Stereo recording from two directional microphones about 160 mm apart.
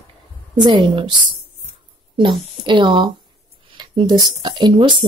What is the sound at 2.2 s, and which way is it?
A woman's voice, 30° right (ahead or behind).